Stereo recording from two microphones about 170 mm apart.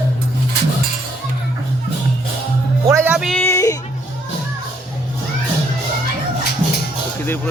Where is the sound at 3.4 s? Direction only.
15° left (ahead or behind).